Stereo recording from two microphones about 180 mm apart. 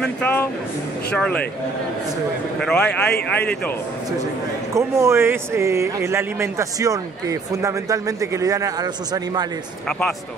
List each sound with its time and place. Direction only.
0.0 s speech: 10° left (ahead or behind)
2.6 s a man's voice: 5° left (ahead or behind)
4.7 s speech: 15° right (ahead or behind)
9.8 s a man's voice: 5° left (ahead or behind)